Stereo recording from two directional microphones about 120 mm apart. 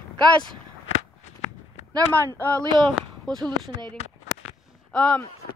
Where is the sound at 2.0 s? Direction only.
30° right (ahead or behind).